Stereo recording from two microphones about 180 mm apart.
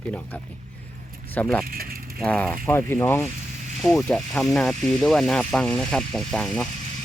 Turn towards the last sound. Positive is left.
turn(degrees=5)  # may be behind; listen again after turning